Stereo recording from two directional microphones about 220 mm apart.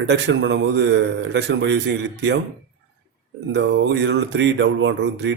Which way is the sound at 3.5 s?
55° right (ahead or behind).